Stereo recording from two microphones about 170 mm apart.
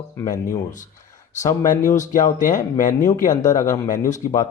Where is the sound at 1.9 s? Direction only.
50° left (ahead or behind).